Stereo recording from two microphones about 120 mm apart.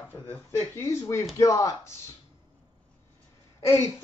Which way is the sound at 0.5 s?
25° left (ahead or behind).